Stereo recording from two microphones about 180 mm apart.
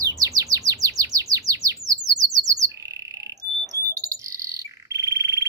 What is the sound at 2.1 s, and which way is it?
Bird, 20° right (ahead or behind).